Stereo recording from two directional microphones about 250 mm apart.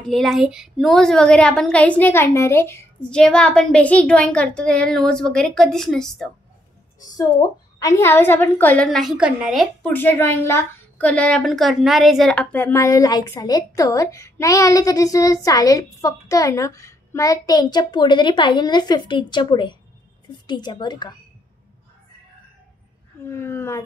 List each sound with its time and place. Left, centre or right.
0.0 s a woman's voice: centre
7.8 s a woman's voice: centre
23.2 s a woman's voice: centre